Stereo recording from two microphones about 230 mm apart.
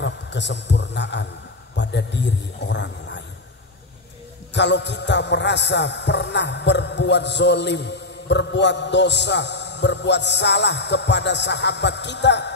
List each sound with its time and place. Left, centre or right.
0.0 s a man's voice: left
1.8 s music: left
4.6 s music: left